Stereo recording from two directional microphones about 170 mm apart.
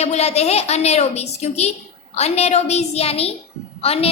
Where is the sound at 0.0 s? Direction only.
40° left (ahead or behind).